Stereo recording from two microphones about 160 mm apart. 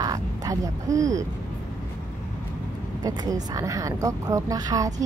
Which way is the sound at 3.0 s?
25° right (ahead or behind).